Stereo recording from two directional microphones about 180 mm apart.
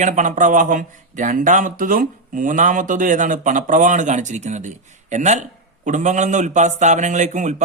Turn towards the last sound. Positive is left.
turn(degrees=-45)  # may be behind; listen again after turning